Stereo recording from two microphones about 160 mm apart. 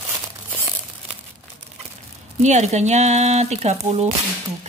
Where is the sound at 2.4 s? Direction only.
45° right (ahead or behind).